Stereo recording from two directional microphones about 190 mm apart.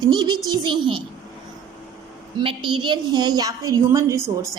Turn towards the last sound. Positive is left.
turn(degrees=-15)  # may be behind; listen again after turning